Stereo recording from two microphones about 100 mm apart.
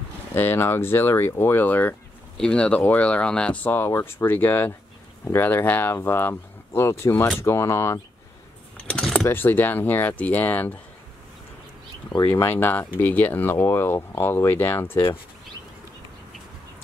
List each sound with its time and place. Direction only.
0.3 s speech: 20° left (ahead or behind)
2.3 s speech: 10° left (ahead or behind)
3.7 s speech: 25° left (ahead or behind)
8.7 s keys jangling: 10° left (ahead or behind)
9.3 s speech: 20° left (ahead or behind)
12.3 s speech: 25° left (ahead or behind)